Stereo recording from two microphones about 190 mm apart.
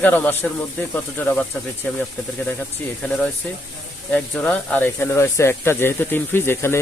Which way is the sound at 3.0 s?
5° left (ahead or behind).